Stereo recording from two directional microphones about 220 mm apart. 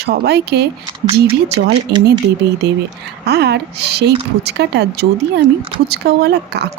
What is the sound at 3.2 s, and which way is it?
Speech, 50° right (ahead or behind).